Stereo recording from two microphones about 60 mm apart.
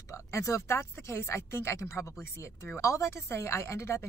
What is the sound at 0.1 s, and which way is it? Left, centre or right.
A woman's voice, left.